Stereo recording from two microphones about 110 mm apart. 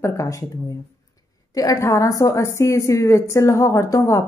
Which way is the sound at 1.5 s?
35° left (ahead or behind).